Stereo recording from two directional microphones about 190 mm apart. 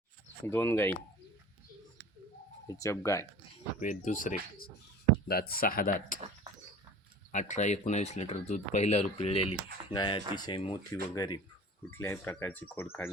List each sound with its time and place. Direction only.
0.4 s speech: 15° left (ahead or behind)
2.6 s speech: 15° left (ahead or behind)
3.8 s speech: 40° left (ahead or behind)
7.3 s speech: 40° left (ahead or behind); by 13.1 s 10° left (ahead or behind)